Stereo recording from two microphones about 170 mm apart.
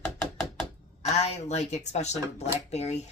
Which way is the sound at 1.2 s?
40° left (ahead or behind).